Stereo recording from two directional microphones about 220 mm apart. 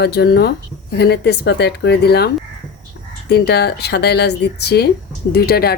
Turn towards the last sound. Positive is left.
turn(degrees=45)  # may be behind; listen again after turning